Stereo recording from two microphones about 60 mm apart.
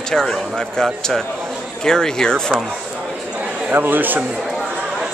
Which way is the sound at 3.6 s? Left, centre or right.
Right.